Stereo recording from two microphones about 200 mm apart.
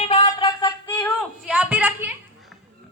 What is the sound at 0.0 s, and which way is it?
Music, 30° left (ahead or behind).